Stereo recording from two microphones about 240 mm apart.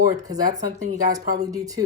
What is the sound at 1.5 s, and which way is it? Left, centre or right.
Speech, centre.